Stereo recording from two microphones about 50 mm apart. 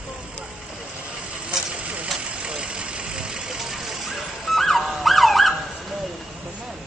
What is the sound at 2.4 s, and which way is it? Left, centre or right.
Vehicle, centre.